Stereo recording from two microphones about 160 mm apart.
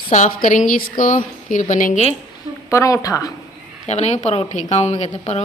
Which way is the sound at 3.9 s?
45° left (ahead or behind).